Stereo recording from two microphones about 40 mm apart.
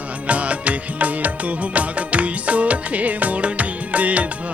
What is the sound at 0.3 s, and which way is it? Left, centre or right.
Music, right.